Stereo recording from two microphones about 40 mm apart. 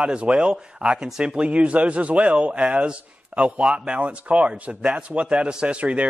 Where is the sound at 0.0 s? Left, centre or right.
Right.